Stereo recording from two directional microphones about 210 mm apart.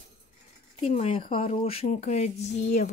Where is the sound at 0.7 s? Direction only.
30° left (ahead or behind).